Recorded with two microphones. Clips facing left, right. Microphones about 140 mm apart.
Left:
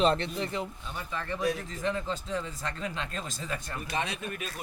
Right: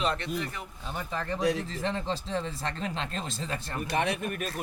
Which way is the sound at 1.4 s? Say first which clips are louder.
Right 3 dB; 90° right.